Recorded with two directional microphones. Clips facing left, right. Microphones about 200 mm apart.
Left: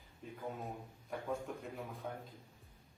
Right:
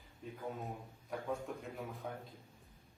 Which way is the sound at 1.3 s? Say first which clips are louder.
Left 1 dB; centre (ahead or behind).